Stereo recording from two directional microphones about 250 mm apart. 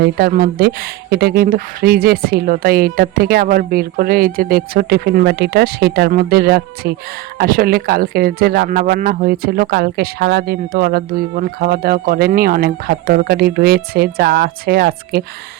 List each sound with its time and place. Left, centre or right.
0.0 s speech: right